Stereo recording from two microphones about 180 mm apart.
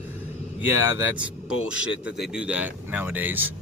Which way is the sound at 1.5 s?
90° left.